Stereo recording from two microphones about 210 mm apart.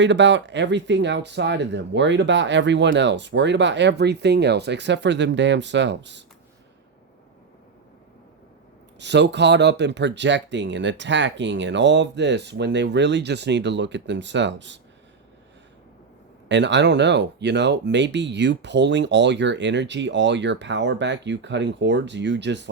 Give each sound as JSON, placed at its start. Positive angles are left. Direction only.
{"t": 0.0, "sound": "speech", "side_deg": -60}
{"t": 9.0, "sound": "speech", "side_deg": -55}
{"t": 16.5, "sound": "speech", "side_deg": -55}